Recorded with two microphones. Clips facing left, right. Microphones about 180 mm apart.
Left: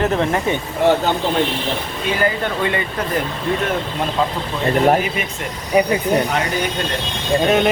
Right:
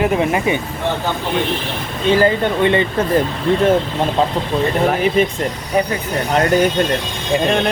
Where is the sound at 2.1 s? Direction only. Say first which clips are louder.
Right 5 dB; 25° right (ahead or behind).